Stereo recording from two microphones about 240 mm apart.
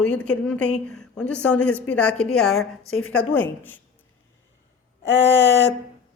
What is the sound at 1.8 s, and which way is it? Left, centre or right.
Speech, centre.